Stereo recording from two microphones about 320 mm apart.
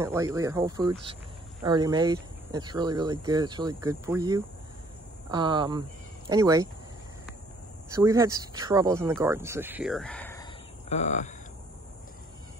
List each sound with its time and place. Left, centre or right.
0.0 s speech: centre
7.9 s speech: centre
10.9 s speech: left